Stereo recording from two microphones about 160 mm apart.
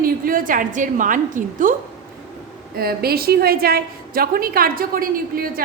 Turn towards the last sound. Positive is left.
turn(degrees=-65)  # may be behind; listen again after turning